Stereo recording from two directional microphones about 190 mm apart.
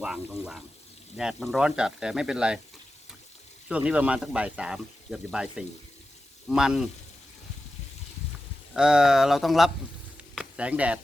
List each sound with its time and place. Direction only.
0.0 s speech: 5° right (ahead or behind)
3.7 s speech: 5° right (ahead or behind)
8.7 s speech: 5° right (ahead or behind)
10.2 s sizzle: 5° right (ahead or behind)